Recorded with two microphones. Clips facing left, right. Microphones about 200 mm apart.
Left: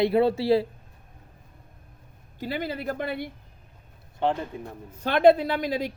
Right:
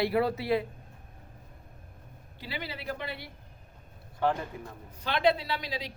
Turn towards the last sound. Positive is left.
turn(degrees=50)  # may be behind; listen again after turning